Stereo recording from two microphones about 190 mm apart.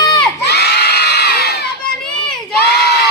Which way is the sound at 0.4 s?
60° left (ahead or behind).